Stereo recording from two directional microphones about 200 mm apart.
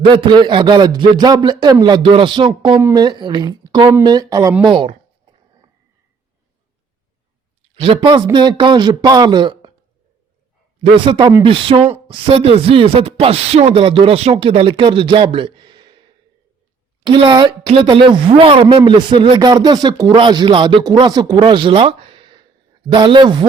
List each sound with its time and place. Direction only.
0.2 s a woman's voice: 25° right (ahead or behind)
7.8 s a woman's voice: 25° right (ahead or behind)
11.0 s a woman's voice: 25° right (ahead or behind)
17.1 s a woman's voice: 25° right (ahead or behind)